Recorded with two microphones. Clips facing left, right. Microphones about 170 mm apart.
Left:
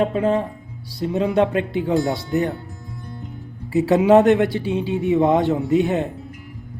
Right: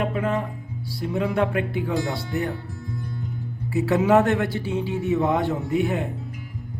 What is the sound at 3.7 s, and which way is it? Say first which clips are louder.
Speech: left 5 dB; 20° left (ahead or behind).